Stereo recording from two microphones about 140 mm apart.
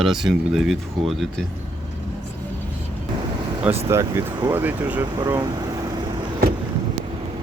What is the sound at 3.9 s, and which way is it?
Speech, 20° right (ahead or behind).